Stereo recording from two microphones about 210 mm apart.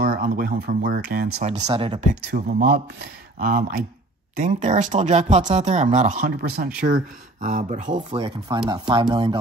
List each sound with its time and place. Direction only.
0.0 s speech: 45° right (ahead or behind)
1.4 s speech: 30° right (ahead or behind)
2.2 s speech: 45° right (ahead or behind)
8.1 s speech: 25° right (ahead or behind)